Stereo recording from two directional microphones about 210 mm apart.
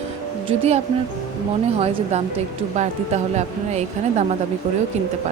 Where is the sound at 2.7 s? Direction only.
35° right (ahead or behind).